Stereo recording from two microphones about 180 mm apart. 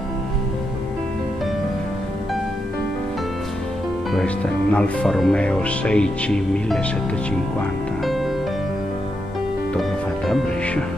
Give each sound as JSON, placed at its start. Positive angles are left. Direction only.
{"t": 4.1, "sound": "speech", "side_deg": 5}
{"t": 9.8, "sound": "speech", "side_deg": 0}